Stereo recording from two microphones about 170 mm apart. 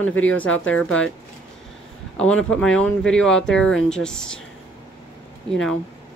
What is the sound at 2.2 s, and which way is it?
Speech, 5° left (ahead or behind).